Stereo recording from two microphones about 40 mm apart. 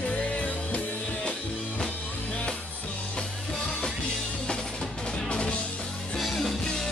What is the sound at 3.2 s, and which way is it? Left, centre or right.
Music, centre.